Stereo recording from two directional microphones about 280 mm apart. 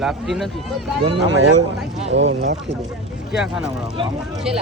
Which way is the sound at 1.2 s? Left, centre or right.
Right.